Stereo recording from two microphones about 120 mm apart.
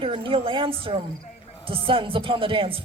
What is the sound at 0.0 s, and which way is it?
A man's voice, 50° right (ahead or behind).